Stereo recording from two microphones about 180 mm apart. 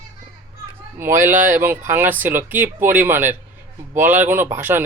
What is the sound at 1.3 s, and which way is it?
Speech, 45° right (ahead or behind).